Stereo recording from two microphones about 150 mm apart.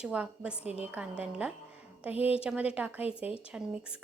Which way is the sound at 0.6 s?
45° left (ahead or behind).